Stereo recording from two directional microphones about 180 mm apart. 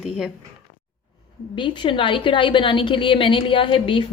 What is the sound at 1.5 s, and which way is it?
A woman's voice, 25° left (ahead or behind).